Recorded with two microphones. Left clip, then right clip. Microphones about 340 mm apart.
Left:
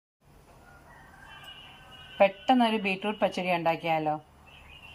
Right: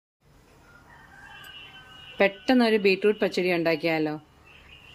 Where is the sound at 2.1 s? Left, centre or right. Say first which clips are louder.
Even; centre.